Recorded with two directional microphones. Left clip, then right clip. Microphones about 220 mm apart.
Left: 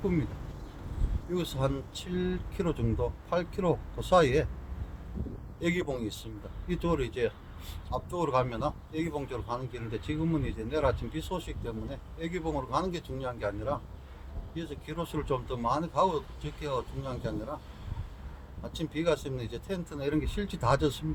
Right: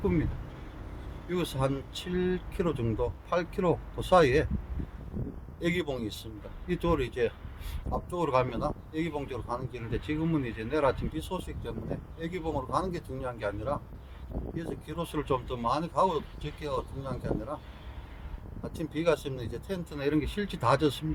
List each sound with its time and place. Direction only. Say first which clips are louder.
1.3 s speech: right 1 dB; 15° right (ahead or behind)
5.5 s speech: even; 15° right (ahead or behind)
18.6 s speech: right 2 dB; 15° right (ahead or behind)